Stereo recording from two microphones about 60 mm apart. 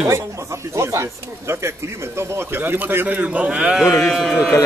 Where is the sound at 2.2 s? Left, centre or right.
Right; by 3.8 s centre.